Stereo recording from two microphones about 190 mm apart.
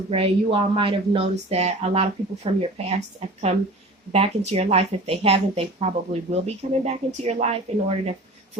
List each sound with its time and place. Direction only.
0.1 s a woman's voice: 30° right (ahead or behind)